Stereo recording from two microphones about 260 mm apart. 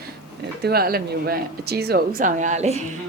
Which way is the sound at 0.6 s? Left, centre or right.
Right.